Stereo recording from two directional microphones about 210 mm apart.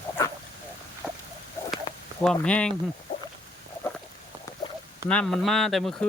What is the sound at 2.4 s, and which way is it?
Speech, 5° left (ahead or behind).